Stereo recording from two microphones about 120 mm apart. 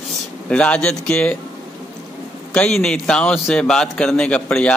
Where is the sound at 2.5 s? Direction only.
5° left (ahead or behind).